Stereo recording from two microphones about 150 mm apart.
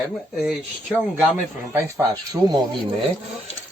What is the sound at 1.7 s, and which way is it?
Speech, 25° right (ahead or behind).